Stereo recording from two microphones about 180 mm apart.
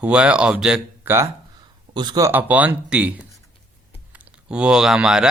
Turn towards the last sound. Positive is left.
turn(degrees=-5)  # may be behind; listen again after turning